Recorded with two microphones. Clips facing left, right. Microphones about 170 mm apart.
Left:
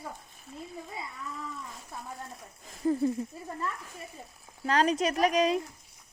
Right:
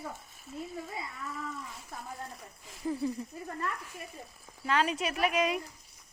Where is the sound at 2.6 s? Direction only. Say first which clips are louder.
Left 6 dB; 45° left (ahead or behind).